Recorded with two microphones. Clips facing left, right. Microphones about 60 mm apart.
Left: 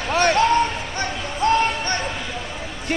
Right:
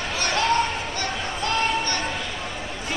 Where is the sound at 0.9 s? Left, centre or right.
Left.